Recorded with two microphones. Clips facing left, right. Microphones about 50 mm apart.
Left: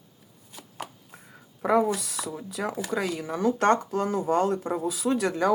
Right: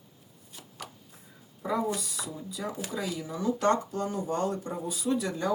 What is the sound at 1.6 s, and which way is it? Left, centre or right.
Speech, left.